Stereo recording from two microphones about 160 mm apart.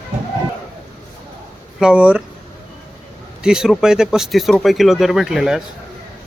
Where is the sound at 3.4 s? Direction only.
5° right (ahead or behind).